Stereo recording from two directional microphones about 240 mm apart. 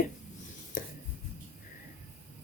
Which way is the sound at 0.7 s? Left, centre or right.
Left.